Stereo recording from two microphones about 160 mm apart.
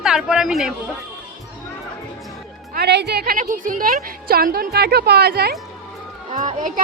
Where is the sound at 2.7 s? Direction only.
90° right.